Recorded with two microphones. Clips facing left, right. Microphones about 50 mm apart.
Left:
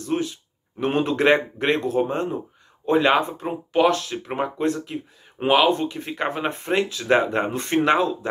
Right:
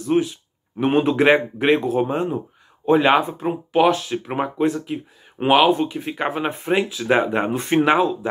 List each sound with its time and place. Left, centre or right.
0.0 s a man's voice: right
7.6 s a man's voice: right
7.9 s speech: centre